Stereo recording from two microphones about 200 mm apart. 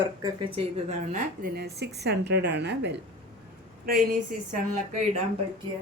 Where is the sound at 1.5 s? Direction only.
55° right (ahead or behind).